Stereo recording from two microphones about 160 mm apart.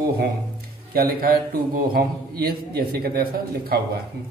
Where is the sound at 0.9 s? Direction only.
70° right (ahead or behind).